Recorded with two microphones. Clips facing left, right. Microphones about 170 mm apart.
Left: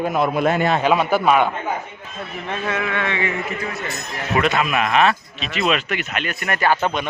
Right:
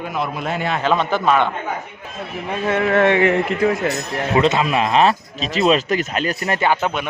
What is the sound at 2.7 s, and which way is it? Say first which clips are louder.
A man's voice: right 10 dB; 40° right (ahead or behind).